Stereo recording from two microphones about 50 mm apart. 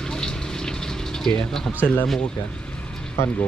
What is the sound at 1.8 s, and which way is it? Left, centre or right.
Speech, left.